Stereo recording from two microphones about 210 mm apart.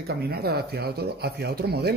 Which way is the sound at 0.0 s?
50° right (ahead or behind).